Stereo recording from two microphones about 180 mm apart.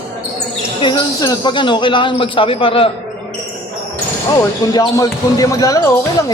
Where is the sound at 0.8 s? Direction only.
25° left (ahead or behind).